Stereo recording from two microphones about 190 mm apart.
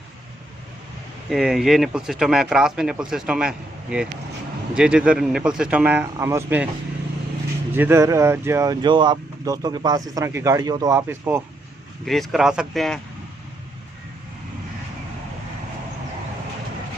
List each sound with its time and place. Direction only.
1.3 s speech: centre (ahead or behind)
7.7 s speech: 10° right (ahead or behind)
12.0 s speech: centre (ahead or behind)